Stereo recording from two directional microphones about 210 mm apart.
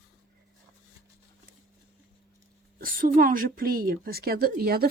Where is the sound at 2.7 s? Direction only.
40° right (ahead or behind).